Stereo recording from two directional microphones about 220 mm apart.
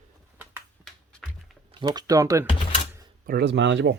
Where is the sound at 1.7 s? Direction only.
20° right (ahead or behind).